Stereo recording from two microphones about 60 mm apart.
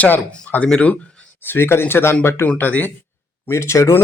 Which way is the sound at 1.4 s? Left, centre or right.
Left.